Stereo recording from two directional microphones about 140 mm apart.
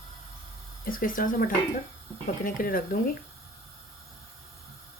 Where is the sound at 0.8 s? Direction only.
80° left.